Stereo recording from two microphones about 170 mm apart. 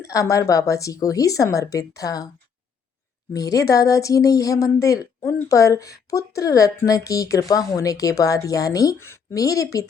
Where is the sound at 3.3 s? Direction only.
20° left (ahead or behind).